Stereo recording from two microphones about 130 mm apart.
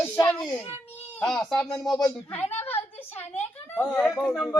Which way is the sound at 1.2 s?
5° left (ahead or behind).